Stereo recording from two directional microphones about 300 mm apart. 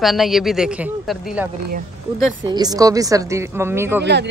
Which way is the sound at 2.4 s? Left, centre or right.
Centre.